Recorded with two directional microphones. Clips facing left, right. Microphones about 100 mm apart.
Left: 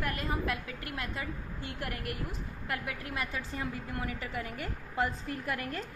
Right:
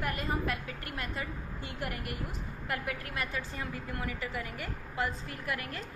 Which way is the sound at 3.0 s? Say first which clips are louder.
Even; 20° left (ahead or behind).